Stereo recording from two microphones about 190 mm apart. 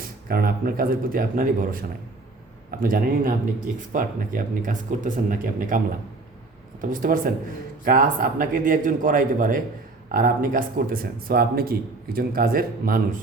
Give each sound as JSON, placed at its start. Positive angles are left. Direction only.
{"t": 0.3, "sound": "speech", "side_deg": -50}
{"t": 6.9, "sound": "speech", "side_deg": -45}